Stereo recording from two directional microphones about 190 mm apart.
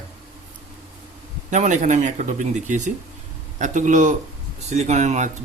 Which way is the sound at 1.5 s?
40° right (ahead or behind).